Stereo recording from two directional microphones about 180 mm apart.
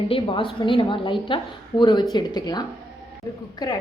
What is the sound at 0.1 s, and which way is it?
A woman's voice, 30° left (ahead or behind).